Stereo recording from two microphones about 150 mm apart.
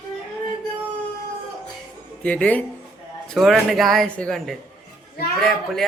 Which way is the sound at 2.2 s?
10° left (ahead or behind).